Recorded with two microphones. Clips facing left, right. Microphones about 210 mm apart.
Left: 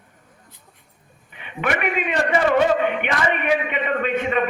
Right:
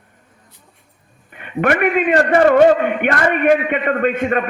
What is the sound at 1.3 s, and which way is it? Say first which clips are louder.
A man's voice: right 7 dB; 50° right (ahead or behind).